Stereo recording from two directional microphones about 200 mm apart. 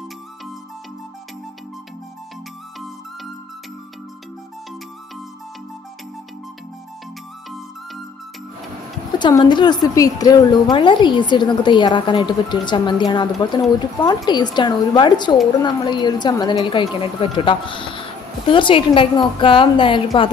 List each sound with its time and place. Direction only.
9.2 s a woman's voice: 20° left (ahead or behind)